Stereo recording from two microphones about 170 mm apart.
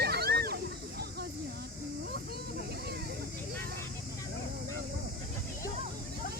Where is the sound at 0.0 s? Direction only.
70° right (ahead or behind).